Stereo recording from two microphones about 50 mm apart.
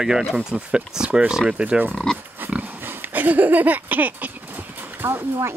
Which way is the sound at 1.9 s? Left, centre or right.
Centre.